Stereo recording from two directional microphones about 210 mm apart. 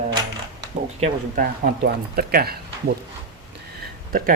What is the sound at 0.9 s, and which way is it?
Speech, 30° right (ahead or behind).